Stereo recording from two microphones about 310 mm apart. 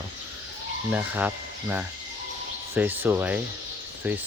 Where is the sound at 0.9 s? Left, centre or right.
Centre.